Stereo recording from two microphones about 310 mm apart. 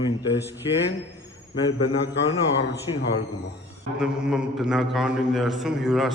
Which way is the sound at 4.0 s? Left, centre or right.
Centre.